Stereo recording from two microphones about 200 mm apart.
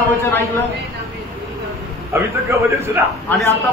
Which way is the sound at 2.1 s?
15° right (ahead or behind).